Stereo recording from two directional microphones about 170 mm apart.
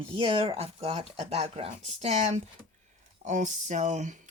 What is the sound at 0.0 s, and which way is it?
Speech, 30° right (ahead or behind).